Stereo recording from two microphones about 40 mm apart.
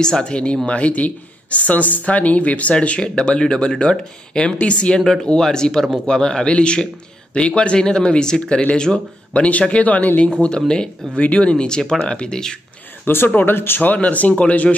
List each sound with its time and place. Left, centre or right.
0.0 s speech: centre; by 3.0 s left
3.0 s speech: left
4.9 s speech: centre
9.3 s speech: left
11.5 s speech: left
13.0 s speech: left
13.5 s speech: left
13.8 s speech: left